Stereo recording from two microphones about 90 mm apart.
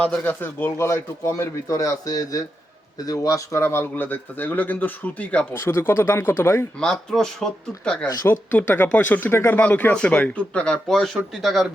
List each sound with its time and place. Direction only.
0.3 s speech: 25° left (ahead or behind)
5.5 s speech: 30° left (ahead or behind)
6.7 s speech: 10° left (ahead or behind)
8.3 s speech: 20° left (ahead or behind); by 11.7 s centre (ahead or behind)